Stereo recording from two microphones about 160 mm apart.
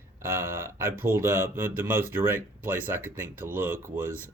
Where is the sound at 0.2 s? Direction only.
15° right (ahead or behind).